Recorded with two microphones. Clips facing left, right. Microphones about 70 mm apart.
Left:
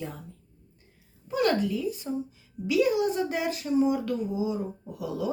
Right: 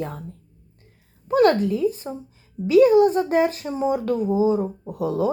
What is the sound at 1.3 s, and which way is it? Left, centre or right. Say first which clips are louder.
Speech: right 8 dB; right.